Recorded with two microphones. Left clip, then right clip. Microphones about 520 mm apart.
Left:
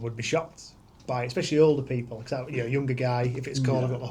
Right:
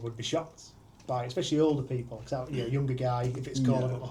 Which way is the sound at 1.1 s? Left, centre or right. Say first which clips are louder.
Left 3 dB; left.